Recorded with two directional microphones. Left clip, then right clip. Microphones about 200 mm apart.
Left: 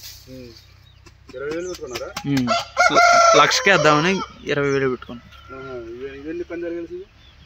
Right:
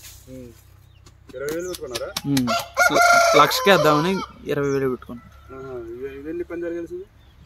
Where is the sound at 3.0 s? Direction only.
35° left (ahead or behind).